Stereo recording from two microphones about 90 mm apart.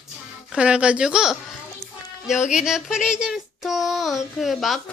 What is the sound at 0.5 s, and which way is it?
Speech, 10° right (ahead or behind).